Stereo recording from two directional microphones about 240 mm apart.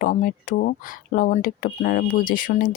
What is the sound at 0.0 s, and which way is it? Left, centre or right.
Speech, left.